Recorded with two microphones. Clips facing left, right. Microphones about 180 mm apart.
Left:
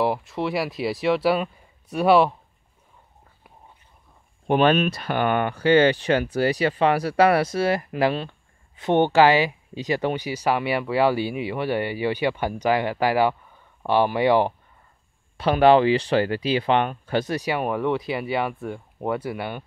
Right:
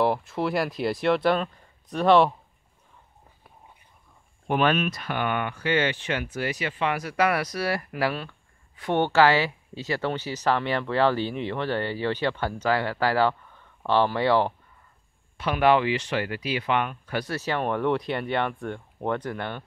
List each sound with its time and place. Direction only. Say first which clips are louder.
0.0 s speech: even; centre (ahead or behind)
4.5 s speech: left 5 dB; 25° left (ahead or behind)
15.3 s speech: left 5 dB; 35° left (ahead or behind); by 19.6 s 10° left (ahead or behind)